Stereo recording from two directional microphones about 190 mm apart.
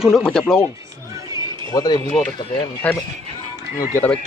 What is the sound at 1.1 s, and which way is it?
Music, 20° right (ahead or behind).